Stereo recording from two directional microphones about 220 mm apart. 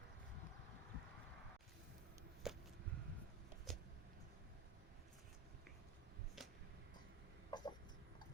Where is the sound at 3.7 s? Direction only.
Centre (ahead or behind).